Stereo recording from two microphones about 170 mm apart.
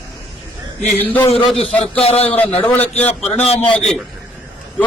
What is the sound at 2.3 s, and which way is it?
Speech, 10° left (ahead or behind).